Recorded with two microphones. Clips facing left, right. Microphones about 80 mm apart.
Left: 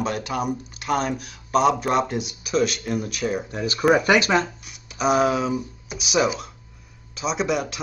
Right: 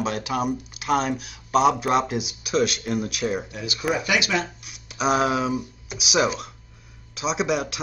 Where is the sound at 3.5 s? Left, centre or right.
Left.